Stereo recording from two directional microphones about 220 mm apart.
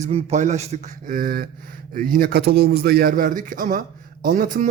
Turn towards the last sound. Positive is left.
turn(degrees=-40)  # may be behind; listen again after turning